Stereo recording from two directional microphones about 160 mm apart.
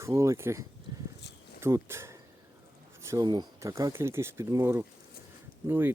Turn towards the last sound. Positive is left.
turn(degrees=-15)  # may be behind; listen again after turning